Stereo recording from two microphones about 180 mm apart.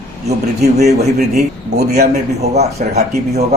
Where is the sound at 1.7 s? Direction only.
60° right (ahead or behind).